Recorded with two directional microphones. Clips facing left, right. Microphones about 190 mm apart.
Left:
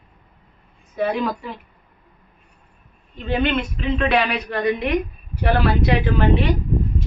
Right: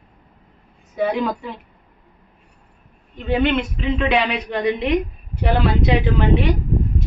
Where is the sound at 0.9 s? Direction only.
15° right (ahead or behind).